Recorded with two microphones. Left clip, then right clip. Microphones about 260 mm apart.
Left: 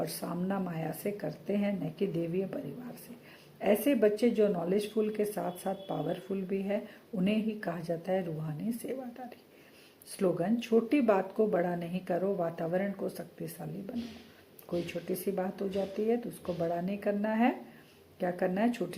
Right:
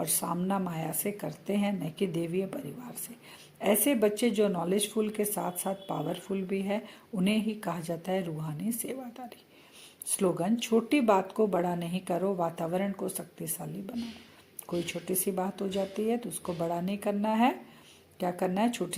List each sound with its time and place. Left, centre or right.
0.2 s speech: right
3.6 s speech: right
10.2 s speech: right
14.7 s speech: right